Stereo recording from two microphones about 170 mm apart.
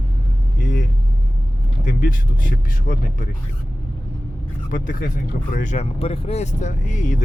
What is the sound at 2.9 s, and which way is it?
Speech, 60° left (ahead or behind).